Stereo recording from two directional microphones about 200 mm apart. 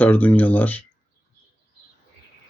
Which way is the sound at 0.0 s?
10° left (ahead or behind).